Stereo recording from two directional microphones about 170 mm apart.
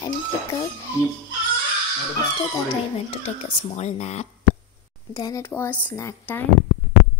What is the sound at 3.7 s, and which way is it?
Speech, 40° left (ahead or behind).